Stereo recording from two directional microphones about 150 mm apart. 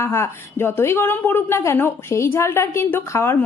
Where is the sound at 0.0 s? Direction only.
15° left (ahead or behind).